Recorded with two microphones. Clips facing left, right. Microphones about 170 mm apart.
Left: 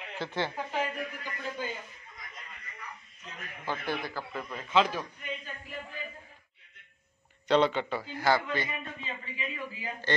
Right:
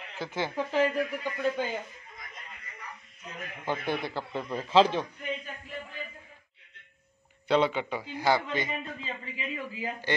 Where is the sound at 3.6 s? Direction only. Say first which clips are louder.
Right 3 dB; 20° right (ahead or behind).